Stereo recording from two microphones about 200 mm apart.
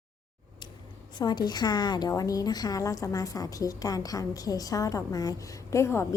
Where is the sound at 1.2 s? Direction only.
20° left (ahead or behind).